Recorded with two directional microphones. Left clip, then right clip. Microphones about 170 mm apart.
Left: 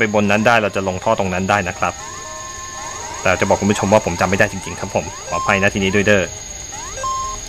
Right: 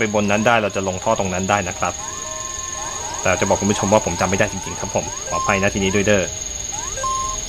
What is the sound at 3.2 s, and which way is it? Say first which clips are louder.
Cricket: left 2 dB; 15° left (ahead or behind).